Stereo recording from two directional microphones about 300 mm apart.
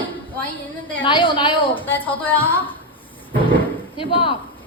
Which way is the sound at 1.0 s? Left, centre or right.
Centre.